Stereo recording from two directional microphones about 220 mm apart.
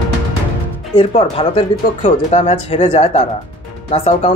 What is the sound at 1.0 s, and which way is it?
Speech, 25° left (ahead or behind).